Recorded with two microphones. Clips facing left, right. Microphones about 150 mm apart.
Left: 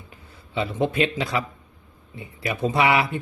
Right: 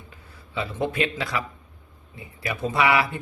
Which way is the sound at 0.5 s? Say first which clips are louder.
Left 3 dB; 25° left (ahead or behind).